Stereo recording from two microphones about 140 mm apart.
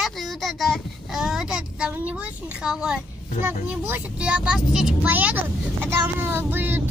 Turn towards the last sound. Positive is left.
turn(degrees=-15)  # may be behind; listen again after turning